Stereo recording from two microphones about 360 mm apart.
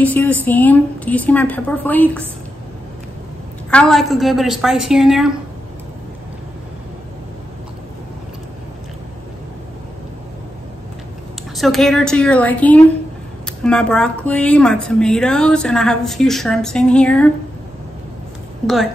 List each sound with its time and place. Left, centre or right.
0.0 s a woman's voice: centre
3.7 s a woman's voice: centre
11.5 s a woman's voice: centre